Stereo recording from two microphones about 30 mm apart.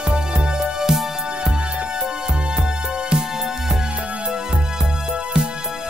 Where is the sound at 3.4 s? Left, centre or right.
Centre.